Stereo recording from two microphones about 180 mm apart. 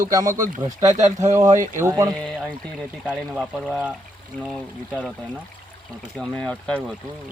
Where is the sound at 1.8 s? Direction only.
20° right (ahead or behind).